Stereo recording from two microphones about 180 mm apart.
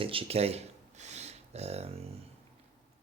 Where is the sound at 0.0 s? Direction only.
30° right (ahead or behind).